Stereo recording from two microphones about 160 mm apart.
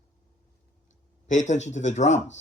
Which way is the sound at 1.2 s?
50° left (ahead or behind).